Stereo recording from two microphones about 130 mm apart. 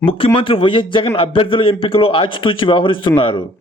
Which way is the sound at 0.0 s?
45° left (ahead or behind).